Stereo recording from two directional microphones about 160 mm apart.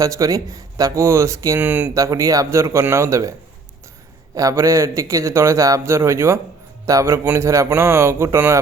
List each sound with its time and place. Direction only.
0.0 s speech: 20° right (ahead or behind)
4.4 s a man's voice: 20° right (ahead or behind)